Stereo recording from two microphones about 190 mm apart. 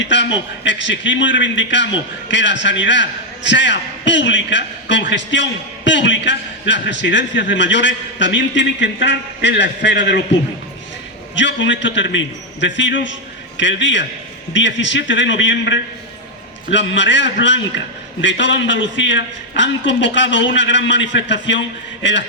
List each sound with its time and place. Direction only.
0.0 s a man's voice: 70° left (ahead or behind)
11.3 s a man's voice: 70° left (ahead or behind)